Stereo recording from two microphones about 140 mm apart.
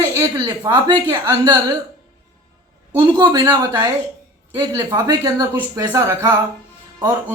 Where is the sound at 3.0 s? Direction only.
35° right (ahead or behind).